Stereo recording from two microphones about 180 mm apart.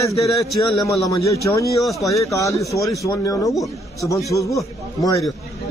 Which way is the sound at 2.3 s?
15° left (ahead or behind).